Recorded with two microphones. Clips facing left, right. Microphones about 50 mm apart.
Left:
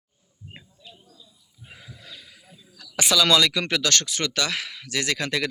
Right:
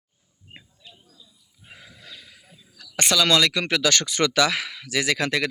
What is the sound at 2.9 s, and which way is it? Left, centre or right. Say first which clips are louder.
Speech: even; right.